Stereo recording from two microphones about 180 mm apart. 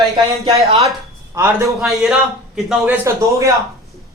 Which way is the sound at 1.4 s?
15° right (ahead or behind).